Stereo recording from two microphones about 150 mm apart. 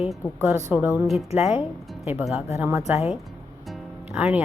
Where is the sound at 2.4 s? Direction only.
20° right (ahead or behind).